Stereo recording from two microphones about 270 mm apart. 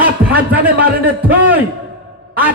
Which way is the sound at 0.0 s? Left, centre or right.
Centre.